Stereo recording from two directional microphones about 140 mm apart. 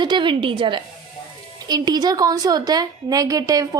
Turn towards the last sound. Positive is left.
turn(degrees=-25)  # may be behind; listen again after turning